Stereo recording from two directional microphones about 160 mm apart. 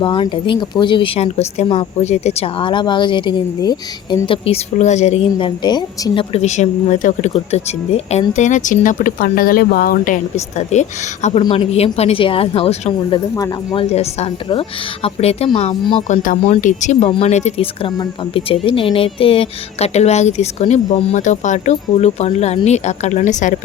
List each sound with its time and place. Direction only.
0.0 s speech: 30° left (ahead or behind)
13.3 s speech: 25° left (ahead or behind)
13.9 s speech: 40° left (ahead or behind)